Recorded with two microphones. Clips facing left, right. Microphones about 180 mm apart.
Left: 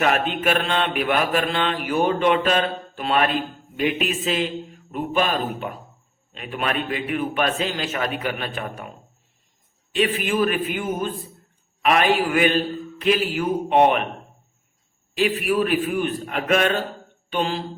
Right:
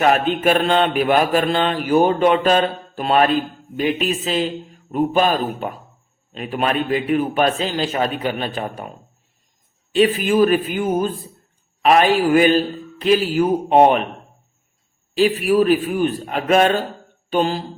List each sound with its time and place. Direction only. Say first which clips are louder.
0.0 s mantra: right 5 dB; 35° right (ahead or behind)
9.9 s mantra: right 6 dB; 35° right (ahead or behind)
15.1 s mantra: right 5 dB; 35° right (ahead or behind)